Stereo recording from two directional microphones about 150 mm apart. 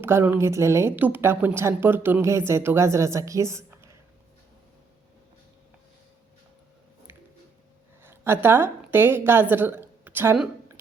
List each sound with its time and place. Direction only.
0.0 s a woman's voice: 15° right (ahead or behind)
8.0 s a woman's voice: 15° right (ahead or behind)